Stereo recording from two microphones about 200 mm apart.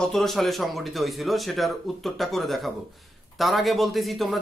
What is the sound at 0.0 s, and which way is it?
Speech, centre (ahead or behind).